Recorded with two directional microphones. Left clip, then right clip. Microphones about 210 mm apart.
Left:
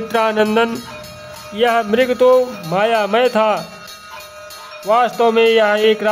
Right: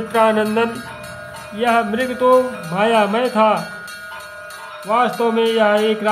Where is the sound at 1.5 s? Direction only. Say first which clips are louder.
Left 3 dB; 40° left (ahead or behind).